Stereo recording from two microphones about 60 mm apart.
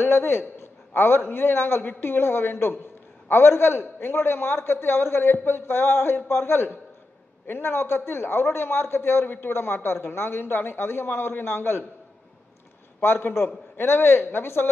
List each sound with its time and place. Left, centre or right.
0.0 s a man's voice: left
13.0 s a man's voice: left